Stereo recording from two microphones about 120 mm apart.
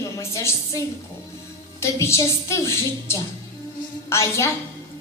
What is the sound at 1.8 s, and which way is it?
A woman's voice, 25° left (ahead or behind).